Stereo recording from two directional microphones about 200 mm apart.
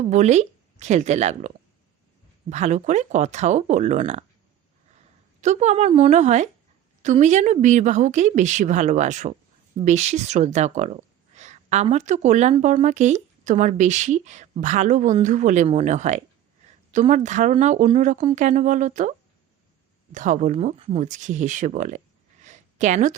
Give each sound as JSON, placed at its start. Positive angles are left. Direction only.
{"t": 0.0, "sound": "speech", "side_deg": -35}
{"t": 5.4, "sound": "speech", "side_deg": -35}
{"t": 20.1, "sound": "speech", "side_deg": -40}
{"t": 22.4, "sound": "a sound", "side_deg": -40}